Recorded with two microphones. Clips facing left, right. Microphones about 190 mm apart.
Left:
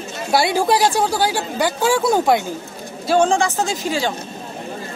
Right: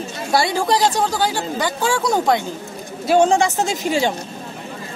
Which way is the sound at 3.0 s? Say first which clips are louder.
Right 1 dB; 20° right (ahead or behind).